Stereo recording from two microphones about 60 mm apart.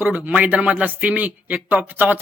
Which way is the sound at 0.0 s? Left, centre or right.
Right.